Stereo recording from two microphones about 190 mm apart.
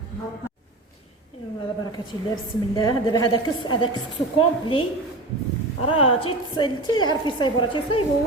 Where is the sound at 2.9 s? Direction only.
20° left (ahead or behind).